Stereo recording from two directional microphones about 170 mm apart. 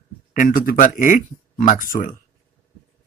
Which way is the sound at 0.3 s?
50° left (ahead or behind).